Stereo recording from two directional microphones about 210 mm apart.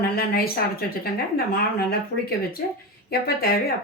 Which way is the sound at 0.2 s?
45° left (ahead or behind).